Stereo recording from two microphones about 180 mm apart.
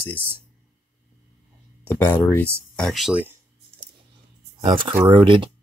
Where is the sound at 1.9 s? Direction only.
10° left (ahead or behind); by 3.4 s 10° right (ahead or behind).